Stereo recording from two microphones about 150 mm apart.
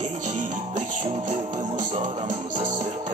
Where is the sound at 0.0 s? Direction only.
50° right (ahead or behind).